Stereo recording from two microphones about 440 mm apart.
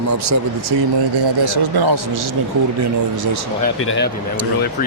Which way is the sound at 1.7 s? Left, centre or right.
Right.